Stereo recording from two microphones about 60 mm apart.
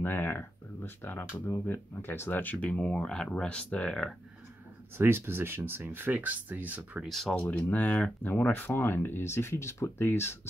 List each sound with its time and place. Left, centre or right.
0.0 s speech: left
4.9 s speech: right
7.1 s speech: centre
7.3 s speech: left